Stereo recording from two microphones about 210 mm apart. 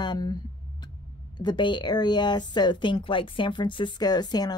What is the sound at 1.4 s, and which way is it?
A woman's voice, 20° left (ahead or behind).